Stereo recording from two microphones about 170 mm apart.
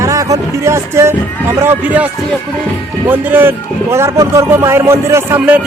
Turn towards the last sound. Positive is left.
turn(degrees=-10)  # may be behind; listen again after turning